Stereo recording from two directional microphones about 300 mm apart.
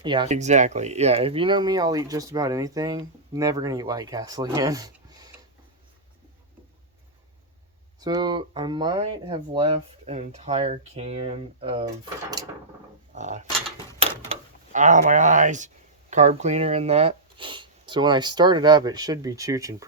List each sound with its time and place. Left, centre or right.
0.0 s speech: centre
7.9 s speech: centre
13.1 s a sound: right
14.0 s speech: right